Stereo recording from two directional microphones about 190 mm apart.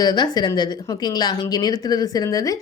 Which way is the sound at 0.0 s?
20° left (ahead or behind).